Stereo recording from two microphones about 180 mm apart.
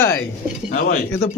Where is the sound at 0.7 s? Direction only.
45° left (ahead or behind).